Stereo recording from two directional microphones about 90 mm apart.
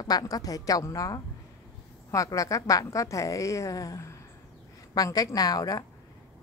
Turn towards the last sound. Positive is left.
turn(degrees=45)  # may be behind; listen again after turning